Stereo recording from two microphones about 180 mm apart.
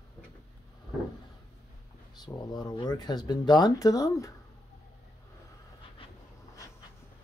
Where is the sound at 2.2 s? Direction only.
25° left (ahead or behind).